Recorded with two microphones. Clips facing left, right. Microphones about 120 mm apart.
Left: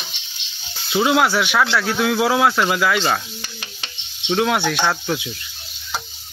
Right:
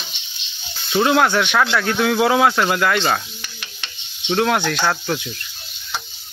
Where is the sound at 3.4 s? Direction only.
35° left (ahead or behind).